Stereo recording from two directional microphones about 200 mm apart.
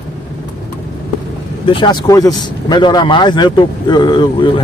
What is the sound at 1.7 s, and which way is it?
A man's voice, 25° left (ahead or behind).